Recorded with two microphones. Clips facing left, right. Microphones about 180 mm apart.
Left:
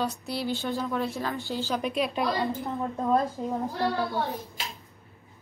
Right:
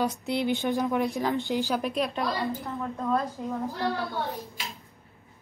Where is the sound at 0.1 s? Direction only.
20° right (ahead or behind).